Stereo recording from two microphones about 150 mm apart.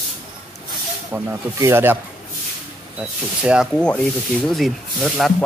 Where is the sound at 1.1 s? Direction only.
15° right (ahead or behind).